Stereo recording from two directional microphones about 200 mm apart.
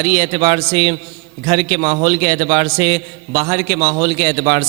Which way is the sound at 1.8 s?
25° right (ahead or behind).